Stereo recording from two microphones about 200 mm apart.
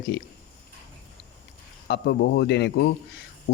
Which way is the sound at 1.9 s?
55° left (ahead or behind).